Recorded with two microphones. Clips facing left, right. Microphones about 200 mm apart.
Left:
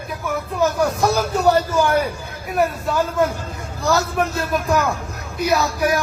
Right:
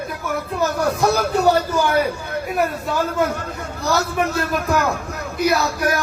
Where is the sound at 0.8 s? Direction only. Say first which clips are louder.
Right 1 dB; 65° right (ahead or behind).